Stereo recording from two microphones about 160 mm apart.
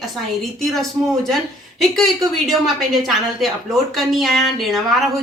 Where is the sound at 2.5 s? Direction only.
Centre (ahead or behind).